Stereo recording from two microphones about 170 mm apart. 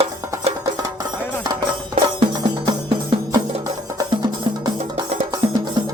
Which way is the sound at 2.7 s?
25° right (ahead or behind).